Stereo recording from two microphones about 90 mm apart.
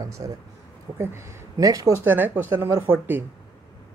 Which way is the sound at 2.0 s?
25° right (ahead or behind).